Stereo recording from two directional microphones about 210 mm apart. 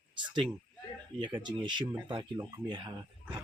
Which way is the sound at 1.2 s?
20° right (ahead or behind).